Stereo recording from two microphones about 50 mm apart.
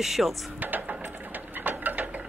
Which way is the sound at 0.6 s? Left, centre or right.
Right.